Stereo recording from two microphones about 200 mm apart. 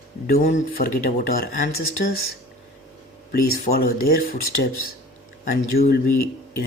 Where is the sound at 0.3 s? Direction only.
45° left (ahead or behind).